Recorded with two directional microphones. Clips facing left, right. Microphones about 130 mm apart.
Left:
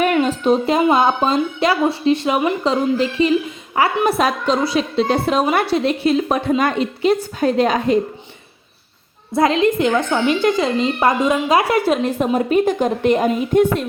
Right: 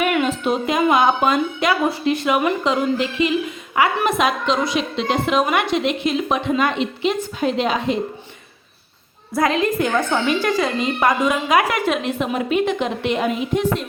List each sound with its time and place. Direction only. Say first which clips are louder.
0.0 s a woman's voice: left 3 dB; 35° left (ahead or behind)
9.3 s a woman's voice: left 3 dB; 25° left (ahead or behind); by 13.8 s 50° left (ahead or behind)